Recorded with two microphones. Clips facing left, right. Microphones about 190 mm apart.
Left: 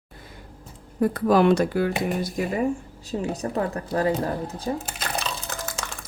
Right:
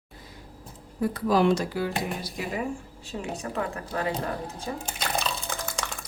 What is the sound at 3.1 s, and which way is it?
A woman's voice, 35° left (ahead or behind).